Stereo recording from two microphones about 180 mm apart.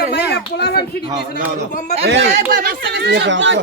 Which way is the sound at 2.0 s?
75° right (ahead or behind).